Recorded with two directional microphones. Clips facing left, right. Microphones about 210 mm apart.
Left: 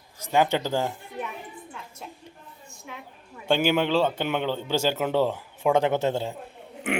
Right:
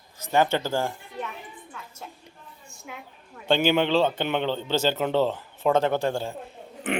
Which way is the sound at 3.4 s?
10° left (ahead or behind).